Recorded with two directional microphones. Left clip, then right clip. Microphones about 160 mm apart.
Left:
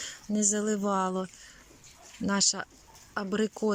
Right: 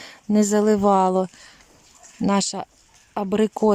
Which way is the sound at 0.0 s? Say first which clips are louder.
Right 8 dB; 30° right (ahead or behind).